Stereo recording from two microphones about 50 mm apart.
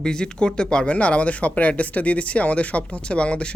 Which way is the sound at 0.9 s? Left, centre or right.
Left.